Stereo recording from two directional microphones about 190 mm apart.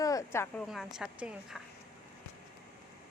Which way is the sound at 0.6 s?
Centre (ahead or behind).